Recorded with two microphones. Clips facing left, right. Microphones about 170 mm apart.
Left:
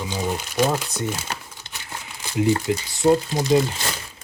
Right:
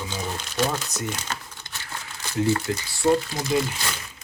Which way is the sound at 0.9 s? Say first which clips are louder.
Left 4 dB; 25° left (ahead or behind).